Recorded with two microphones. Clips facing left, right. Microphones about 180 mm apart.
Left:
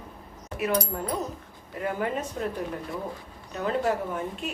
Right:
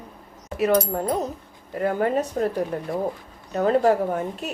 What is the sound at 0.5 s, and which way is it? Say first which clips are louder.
A woman's voice: right 7 dB; 40° right (ahead or behind).